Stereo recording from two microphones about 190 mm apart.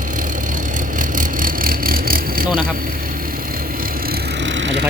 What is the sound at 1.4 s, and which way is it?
Vehicle, 50° right (ahead or behind).